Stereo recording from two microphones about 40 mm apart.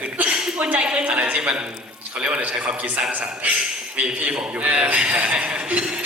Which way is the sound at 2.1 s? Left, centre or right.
Right.